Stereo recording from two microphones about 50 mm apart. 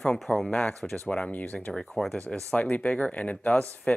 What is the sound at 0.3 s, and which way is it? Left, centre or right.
Speech, left.